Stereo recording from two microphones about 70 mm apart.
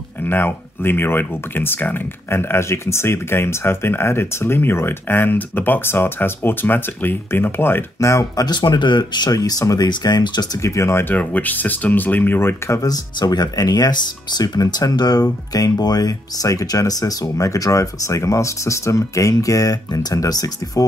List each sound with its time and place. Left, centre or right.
0.2 s speech: left
8.0 s speech: left
8.5 s speech: left
10.6 s speech: left
11.1 s speech: left
12.8 s speech: left